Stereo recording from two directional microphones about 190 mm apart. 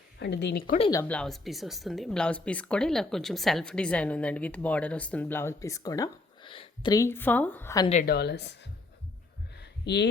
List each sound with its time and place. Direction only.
0.2 s a woman's voice: 65° left (ahead or behind)
1.0 s speech: 5° left (ahead or behind)
8.0 s a woman's voice: 60° left (ahead or behind)
9.6 s a sound: 65° left (ahead or behind)